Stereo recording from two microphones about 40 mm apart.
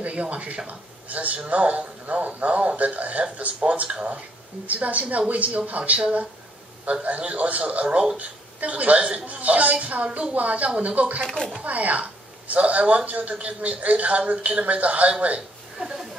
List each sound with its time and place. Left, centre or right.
0.0 s a woman's voice: right
11.2 s speech: centre
11.6 s a woman's voice: right